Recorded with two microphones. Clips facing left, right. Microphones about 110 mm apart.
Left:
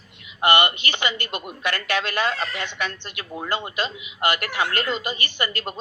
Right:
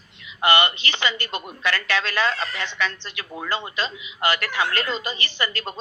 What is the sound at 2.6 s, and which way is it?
A woman's voice, 50° left (ahead or behind).